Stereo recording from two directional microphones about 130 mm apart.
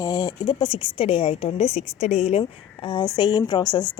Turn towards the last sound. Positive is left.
turn(degrees=30)  # may be behind; listen again after turning